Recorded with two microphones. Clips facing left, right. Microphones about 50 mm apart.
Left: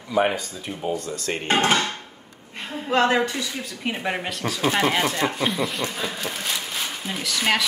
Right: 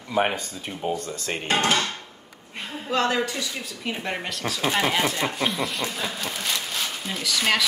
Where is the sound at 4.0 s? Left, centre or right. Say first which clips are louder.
Left 3 dB; centre.